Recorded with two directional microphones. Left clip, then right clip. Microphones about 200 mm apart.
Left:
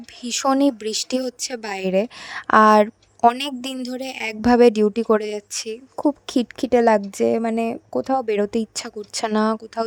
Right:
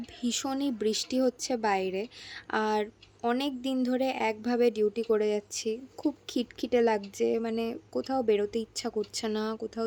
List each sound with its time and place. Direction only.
0.2 s speech: 50° left (ahead or behind)